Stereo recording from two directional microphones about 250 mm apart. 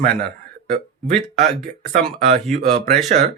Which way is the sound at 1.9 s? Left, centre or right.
Right.